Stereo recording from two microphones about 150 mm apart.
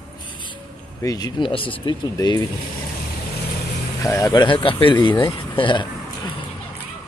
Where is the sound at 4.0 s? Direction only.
20° left (ahead or behind).